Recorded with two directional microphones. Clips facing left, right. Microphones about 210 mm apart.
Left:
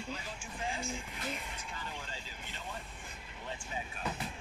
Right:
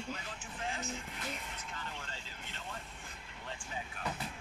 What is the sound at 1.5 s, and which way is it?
Vehicle, 10° left (ahead or behind).